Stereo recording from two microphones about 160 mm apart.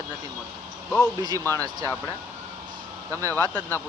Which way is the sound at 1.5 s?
20° right (ahead or behind).